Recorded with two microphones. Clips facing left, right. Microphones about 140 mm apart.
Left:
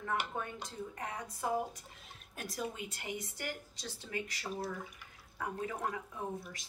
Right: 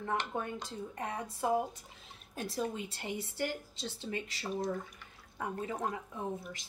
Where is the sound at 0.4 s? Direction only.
30° right (ahead or behind).